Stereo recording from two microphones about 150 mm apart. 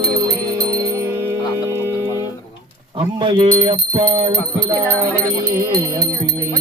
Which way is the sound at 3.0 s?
35° right (ahead or behind).